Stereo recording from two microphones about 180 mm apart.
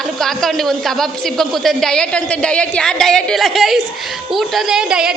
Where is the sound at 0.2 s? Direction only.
Centre (ahead or behind).